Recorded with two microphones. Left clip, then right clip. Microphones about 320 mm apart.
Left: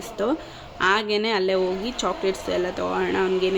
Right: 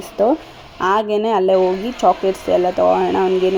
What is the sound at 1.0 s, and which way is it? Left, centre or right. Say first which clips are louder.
Speech: right 7 dB; centre.